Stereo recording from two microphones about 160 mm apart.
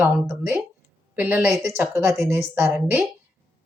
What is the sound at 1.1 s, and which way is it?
Speech, 10° right (ahead or behind).